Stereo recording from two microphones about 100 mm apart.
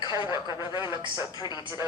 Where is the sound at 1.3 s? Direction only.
45° left (ahead or behind).